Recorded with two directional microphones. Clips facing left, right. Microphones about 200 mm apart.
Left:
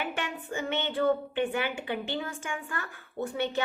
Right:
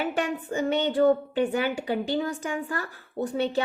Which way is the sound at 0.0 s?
40° right (ahead or behind).